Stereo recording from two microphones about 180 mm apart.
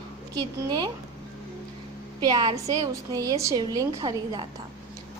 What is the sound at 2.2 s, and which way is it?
A woman's voice, 20° right (ahead or behind).